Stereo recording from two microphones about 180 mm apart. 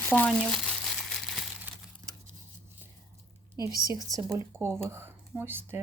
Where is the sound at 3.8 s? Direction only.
20° right (ahead or behind).